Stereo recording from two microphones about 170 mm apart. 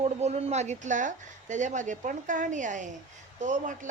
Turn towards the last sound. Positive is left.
turn(degrees=-45)  # may be behind; listen again after turning